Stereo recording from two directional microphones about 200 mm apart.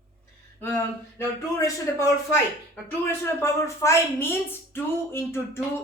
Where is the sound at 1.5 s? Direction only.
15° left (ahead or behind).